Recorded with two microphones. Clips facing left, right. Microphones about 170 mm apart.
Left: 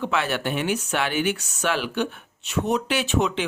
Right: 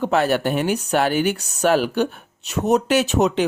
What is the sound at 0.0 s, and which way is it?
Speech, 40° right (ahead or behind).